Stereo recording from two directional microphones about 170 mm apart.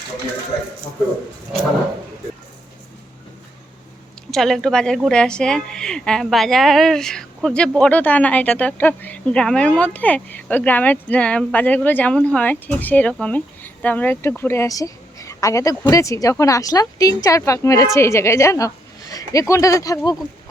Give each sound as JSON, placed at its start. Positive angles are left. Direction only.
{"t": 4.3, "sound": "a woman's voice", "side_deg": 0}